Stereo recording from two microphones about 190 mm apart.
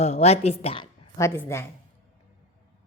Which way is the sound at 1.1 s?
15° left (ahead or behind).